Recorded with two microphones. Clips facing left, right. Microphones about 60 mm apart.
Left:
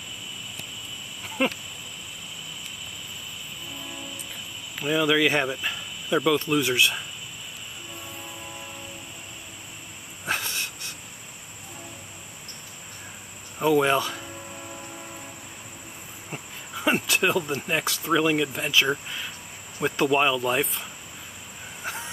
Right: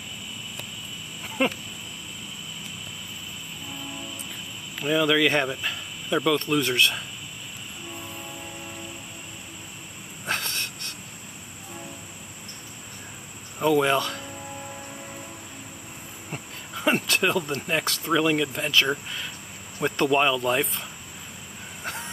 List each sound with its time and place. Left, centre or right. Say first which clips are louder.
1.4 s speech: right 1 dB; centre
4.7 s speech: even; centre
10.2 s wheeze: even; centre
13.6 s speech: even; centre
16.3 s speech: right 1 dB; centre
21.8 s vehicle: even; centre